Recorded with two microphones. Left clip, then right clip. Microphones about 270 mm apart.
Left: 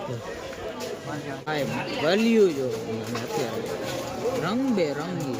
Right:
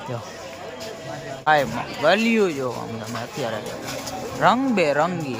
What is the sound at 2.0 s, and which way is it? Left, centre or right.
Speech, centre.